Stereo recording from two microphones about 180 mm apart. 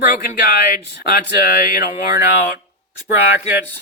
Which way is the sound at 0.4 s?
50° left (ahead or behind).